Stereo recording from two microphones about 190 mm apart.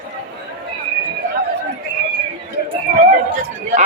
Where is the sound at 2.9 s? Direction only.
50° right (ahead or behind).